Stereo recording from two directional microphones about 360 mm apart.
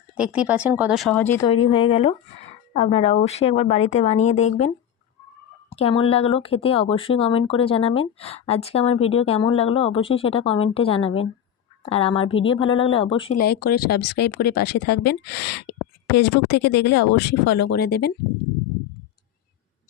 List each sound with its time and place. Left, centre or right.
0.2 s speech: centre
5.7 s speech: centre